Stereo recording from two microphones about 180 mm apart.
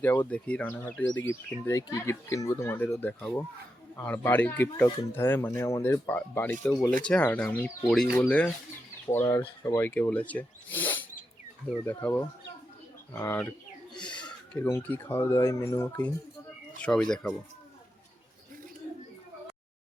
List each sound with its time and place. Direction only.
0.0 s speech: 10° left (ahead or behind)
14.0 s a sound: 5° left (ahead or behind)
14.5 s speech: 10° left (ahead or behind)